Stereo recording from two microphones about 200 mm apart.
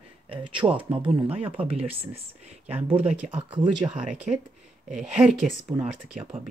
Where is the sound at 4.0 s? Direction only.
5° right (ahead or behind).